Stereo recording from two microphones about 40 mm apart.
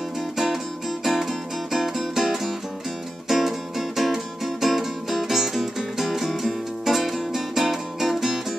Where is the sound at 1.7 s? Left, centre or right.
Centre.